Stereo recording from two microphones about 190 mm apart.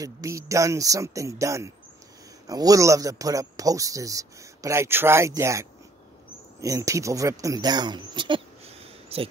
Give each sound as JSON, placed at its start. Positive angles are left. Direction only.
{"t": 0.0, "sound": "a man's voice", "side_deg": -15}